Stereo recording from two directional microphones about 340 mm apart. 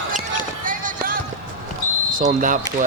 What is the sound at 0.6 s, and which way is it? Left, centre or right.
Run, right.